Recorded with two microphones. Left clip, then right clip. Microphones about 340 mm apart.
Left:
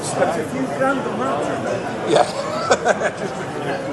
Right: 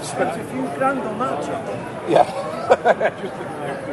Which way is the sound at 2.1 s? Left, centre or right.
Centre.